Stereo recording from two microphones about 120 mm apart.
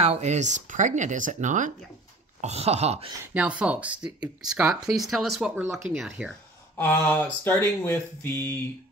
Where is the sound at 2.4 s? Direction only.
60° right (ahead or behind).